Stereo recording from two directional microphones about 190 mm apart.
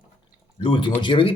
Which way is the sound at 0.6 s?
25° left (ahead or behind).